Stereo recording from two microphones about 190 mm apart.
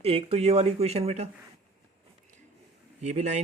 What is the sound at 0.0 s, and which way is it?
Speech, 30° right (ahead or behind).